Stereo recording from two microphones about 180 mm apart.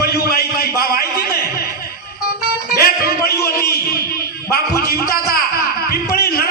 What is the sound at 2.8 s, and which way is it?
Music, 60° left (ahead or behind).